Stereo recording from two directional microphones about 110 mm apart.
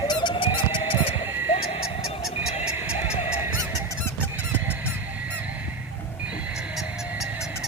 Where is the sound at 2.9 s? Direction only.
80° left.